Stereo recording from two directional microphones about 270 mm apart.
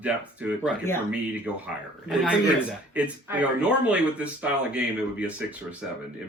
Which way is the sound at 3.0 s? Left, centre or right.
Centre.